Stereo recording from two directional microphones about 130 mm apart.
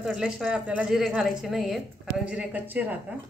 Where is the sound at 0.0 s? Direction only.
5° right (ahead or behind).